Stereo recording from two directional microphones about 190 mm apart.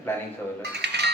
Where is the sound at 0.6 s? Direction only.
60° right (ahead or behind).